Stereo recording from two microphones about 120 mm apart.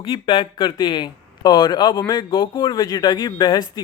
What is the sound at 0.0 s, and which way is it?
Speech, 40° left (ahead or behind).